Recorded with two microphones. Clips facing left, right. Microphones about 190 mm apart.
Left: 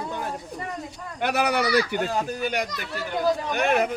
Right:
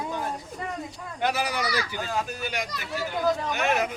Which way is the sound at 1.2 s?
65° left (ahead or behind).